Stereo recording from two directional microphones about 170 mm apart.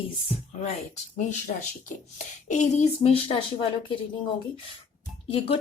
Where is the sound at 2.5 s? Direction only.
40° left (ahead or behind).